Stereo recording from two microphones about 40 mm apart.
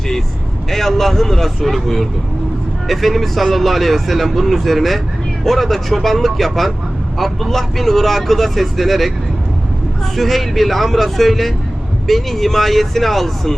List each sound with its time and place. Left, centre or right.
0.7 s speech: centre
10.2 s speech: centre